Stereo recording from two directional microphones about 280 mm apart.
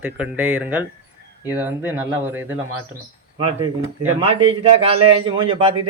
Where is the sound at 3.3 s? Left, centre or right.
Right.